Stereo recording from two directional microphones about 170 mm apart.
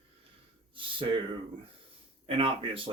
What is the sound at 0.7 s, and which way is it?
Speech, 30° right (ahead or behind).